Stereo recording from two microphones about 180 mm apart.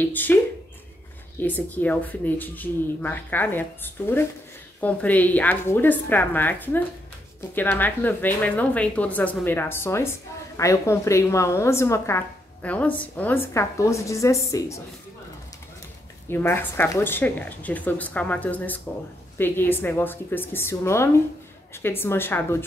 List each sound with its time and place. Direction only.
0.0 s speech: 10° left (ahead or behind)
1.4 s speech: 10° left (ahead or behind)
16.3 s speech: 10° left (ahead or behind)